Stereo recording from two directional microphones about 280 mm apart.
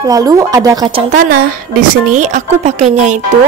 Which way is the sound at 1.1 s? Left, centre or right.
Right.